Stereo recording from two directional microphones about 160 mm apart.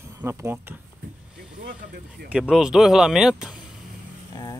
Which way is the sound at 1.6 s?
65° right (ahead or behind).